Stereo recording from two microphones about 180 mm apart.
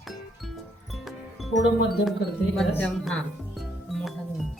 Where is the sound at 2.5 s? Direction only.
5° left (ahead or behind).